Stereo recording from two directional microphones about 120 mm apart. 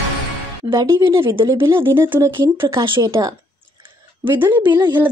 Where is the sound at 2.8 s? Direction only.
35° right (ahead or behind).